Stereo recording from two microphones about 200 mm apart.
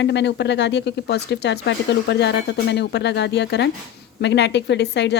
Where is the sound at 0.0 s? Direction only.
60° left (ahead or behind).